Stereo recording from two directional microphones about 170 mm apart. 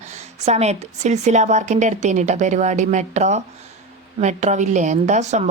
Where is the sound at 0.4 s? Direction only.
40° right (ahead or behind).